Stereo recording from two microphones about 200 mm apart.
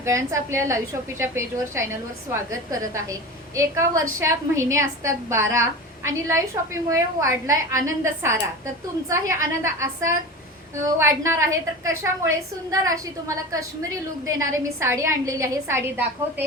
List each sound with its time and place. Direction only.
0.0 s a woman's voice: 15° right (ahead or behind)